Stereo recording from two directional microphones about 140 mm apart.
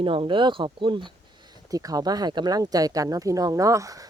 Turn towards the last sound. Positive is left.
turn(degrees=-25)  # may be behind; listen again after turning